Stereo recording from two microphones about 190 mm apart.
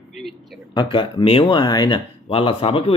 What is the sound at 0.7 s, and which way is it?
Speech, 25° left (ahead or behind).